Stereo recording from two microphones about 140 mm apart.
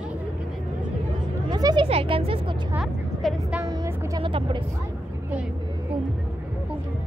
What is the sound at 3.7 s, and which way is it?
Music, 30° right (ahead or behind).